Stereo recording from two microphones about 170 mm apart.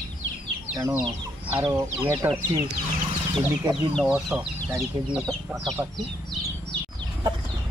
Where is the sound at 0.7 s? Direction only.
20° right (ahead or behind).